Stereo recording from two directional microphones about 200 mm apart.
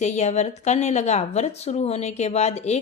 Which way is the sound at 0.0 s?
35° left (ahead or behind).